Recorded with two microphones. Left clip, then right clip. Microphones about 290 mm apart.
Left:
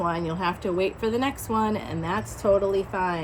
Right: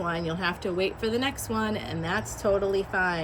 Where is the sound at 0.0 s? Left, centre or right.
Centre.